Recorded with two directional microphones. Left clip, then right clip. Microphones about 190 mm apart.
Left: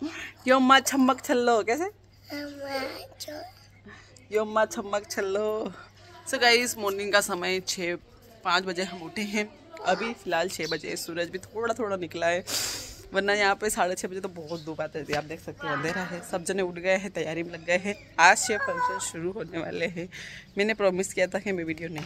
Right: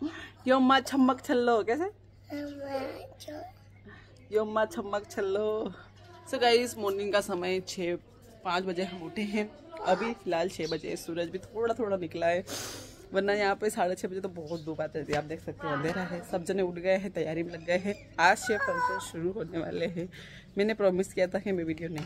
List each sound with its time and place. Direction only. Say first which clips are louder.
0.1 s speech: left 5 dB; 10° left (ahead or behind)
2.3 s speech: left 2 dB; centre (ahead or behind)
4.3 s speech: left 3 dB; 15° left (ahead or behind)
18.6 s speech: left 2 dB; 15° left (ahead or behind)
18.9 s speech: left 1 dB; 5° left (ahead or behind)